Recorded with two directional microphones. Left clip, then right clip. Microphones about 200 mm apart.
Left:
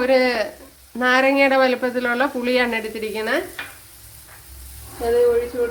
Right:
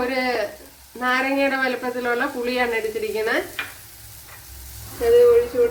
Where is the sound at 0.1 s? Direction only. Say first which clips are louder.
Left 5 dB; 55° left (ahead or behind).